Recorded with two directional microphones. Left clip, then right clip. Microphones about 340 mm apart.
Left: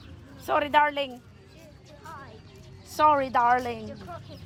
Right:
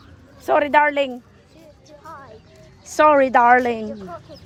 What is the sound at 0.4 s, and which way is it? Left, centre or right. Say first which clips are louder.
Speech: right 7 dB; right.